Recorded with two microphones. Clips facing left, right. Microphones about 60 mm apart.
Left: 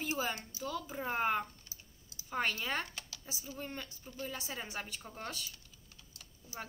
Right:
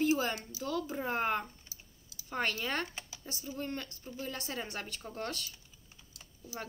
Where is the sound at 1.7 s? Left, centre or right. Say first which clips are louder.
Right 1 dB; left.